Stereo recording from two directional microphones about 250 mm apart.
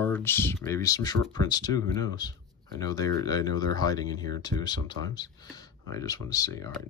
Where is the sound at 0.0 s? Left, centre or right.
Centre.